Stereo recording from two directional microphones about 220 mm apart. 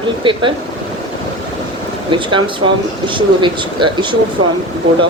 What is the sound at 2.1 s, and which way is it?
Speech, 20° right (ahead or behind).